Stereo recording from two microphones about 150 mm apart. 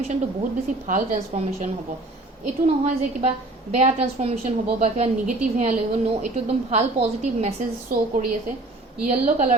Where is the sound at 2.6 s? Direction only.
45° right (ahead or behind).